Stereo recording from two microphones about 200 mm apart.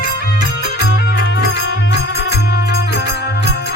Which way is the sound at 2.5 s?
55° left (ahead or behind).